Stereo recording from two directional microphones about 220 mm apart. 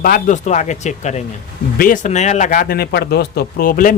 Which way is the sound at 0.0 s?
35° left (ahead or behind).